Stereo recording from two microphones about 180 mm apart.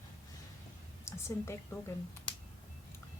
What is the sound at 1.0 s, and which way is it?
Speech, 15° left (ahead or behind).